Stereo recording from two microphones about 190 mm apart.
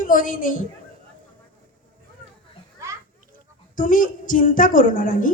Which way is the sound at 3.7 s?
45° left (ahead or behind).